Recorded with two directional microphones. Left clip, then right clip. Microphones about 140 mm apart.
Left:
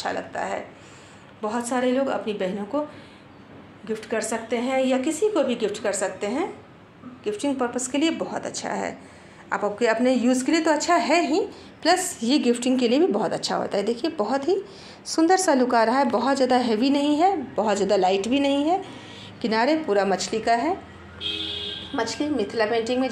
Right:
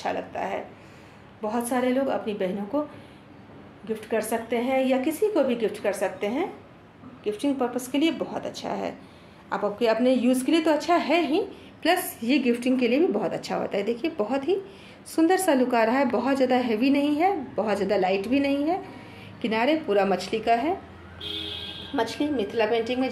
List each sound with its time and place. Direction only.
0.0 s a woman's voice: 20° left (ahead or behind)
3.9 s a woman's voice: 10° left (ahead or behind)
22.1 s a woman's voice: 10° left (ahead or behind)